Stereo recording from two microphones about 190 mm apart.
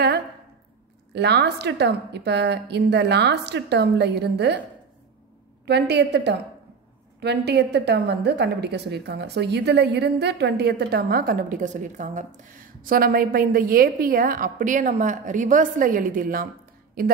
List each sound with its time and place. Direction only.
1.1 s a woman's voice: 60° right (ahead or behind)
5.7 s a woman's voice: 60° right (ahead or behind)